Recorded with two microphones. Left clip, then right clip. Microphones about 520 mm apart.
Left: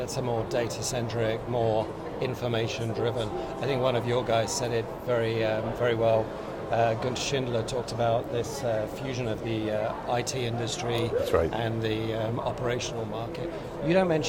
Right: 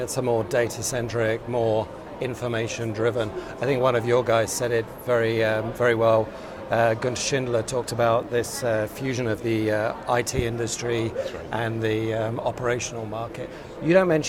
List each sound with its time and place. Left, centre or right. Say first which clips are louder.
0.2 s speech: right 7 dB; right
13.8 s speech: right 5 dB; right